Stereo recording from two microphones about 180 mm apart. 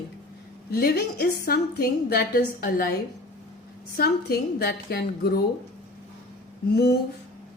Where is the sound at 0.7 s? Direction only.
60° left (ahead or behind).